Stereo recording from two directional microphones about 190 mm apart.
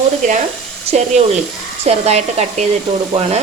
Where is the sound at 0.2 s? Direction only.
40° right (ahead or behind).